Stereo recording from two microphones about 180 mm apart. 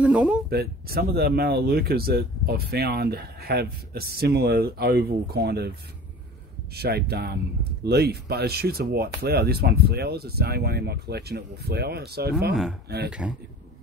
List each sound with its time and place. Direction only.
0.0 s speech: 5° right (ahead or behind)
0.5 s speech: 60° right (ahead or behind)
6.7 s speech: 60° right (ahead or behind)